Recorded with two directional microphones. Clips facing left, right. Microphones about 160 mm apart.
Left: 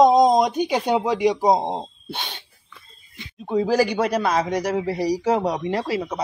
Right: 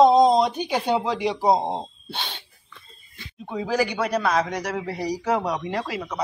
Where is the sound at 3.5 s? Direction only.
35° left (ahead or behind).